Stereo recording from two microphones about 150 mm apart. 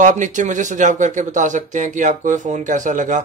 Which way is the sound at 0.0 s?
55° right (ahead or behind).